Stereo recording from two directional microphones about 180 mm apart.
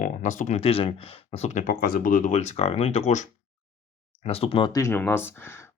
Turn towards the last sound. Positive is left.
turn(degrees=15)  # may be behind; listen again after turning